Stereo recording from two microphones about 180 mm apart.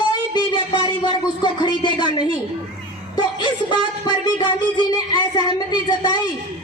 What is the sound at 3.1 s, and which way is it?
Speech, 25° left (ahead or behind).